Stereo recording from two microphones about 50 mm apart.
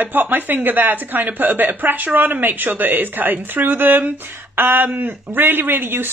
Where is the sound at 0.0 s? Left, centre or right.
Right.